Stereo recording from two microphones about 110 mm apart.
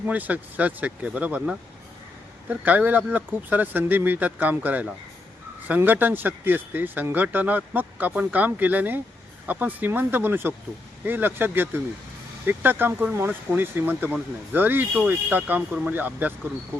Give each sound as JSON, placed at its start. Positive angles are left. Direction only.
{"t": 0.1, "sound": "speech", "side_deg": -15}